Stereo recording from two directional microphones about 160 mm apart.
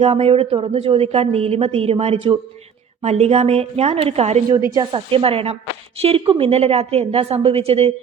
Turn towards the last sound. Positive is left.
turn(degrees=-40)  # may be behind; listen again after turning